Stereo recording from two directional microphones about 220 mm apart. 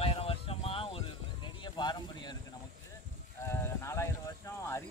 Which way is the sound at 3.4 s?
10° left (ahead or behind).